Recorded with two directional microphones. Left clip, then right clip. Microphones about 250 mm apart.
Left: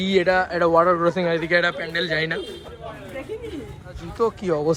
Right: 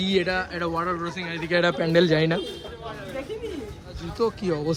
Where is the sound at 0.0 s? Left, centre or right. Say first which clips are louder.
Left 5 dB; centre.